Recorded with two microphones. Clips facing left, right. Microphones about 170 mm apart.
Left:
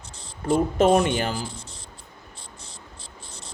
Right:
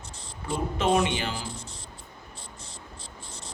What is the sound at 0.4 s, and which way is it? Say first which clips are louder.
Speech: left 7 dB; 45° left (ahead or behind).